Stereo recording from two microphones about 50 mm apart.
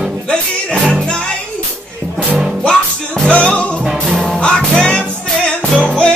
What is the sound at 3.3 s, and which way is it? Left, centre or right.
Music, left.